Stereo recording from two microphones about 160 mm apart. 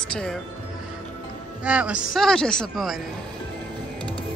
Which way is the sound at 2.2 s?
5° left (ahead or behind).